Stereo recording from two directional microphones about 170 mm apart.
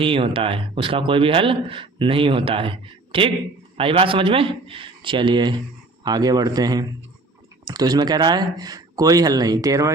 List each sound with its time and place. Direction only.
0.0 s speech: 30° right (ahead or behind)